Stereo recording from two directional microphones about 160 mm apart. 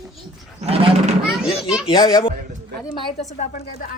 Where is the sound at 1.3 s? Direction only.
Centre (ahead or behind).